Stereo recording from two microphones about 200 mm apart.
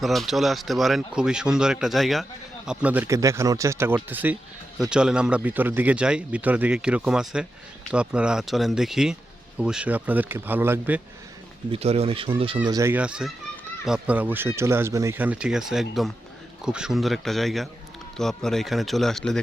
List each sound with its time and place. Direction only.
0.0 s a man's voice: centre (ahead or behind)
11.7 s speech: 30° right (ahead or behind)
12.6 s a man's voice: 15° right (ahead or behind); by 19.4 s centre (ahead or behind)